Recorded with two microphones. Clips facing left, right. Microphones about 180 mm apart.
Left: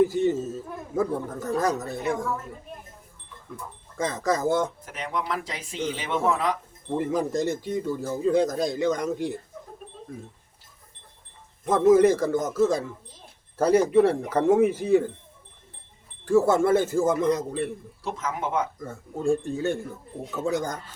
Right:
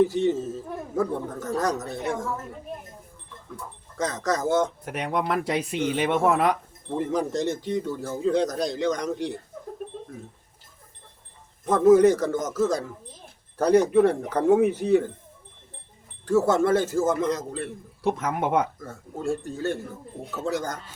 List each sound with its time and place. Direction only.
0.0 s a woman's voice: 10° left (ahead or behind)
3.9 s speech: 5° left (ahead or behind)
4.9 s speech: 60° right (ahead or behind)
6.9 s speech: 5° left (ahead or behind)
11.6 s speech: 5° left (ahead or behind)
16.2 s speech: 10° left (ahead or behind)
18.0 s speech: 60° right (ahead or behind)
18.8 s speech: 15° left (ahead or behind)